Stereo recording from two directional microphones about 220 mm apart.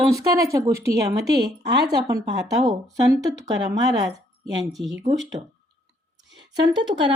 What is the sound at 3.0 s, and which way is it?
Speech, 15° right (ahead or behind).